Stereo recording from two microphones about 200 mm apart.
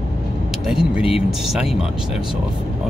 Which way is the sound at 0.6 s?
5° right (ahead or behind).